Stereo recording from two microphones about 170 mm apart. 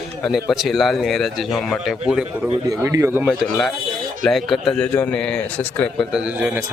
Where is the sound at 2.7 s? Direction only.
20° right (ahead or behind).